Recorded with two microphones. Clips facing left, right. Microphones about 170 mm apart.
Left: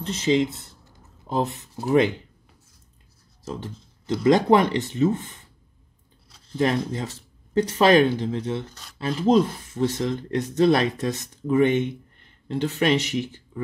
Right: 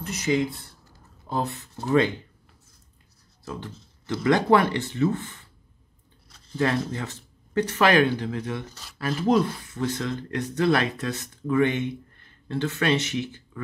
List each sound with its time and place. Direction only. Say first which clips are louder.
0.0 s speech: left 3 dB; 25° left (ahead or behind)
3.4 s speech: left 3 dB; 15° left (ahead or behind)
6.6 s speech: left 2 dB; 20° left (ahead or behind)
8.6 s speech: even; centre (ahead or behind)
8.9 s speech: left 3 dB; 20° left (ahead or behind)